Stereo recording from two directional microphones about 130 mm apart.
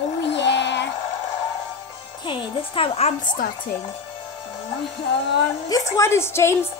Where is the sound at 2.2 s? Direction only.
45° left (ahead or behind).